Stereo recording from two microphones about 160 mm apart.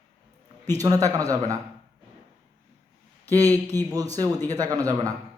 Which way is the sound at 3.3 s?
20° right (ahead or behind).